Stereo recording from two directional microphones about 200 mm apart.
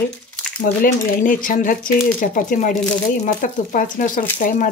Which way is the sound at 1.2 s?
40° left (ahead or behind).